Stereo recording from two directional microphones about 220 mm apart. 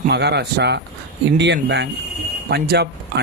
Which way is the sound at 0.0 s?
50° right (ahead or behind).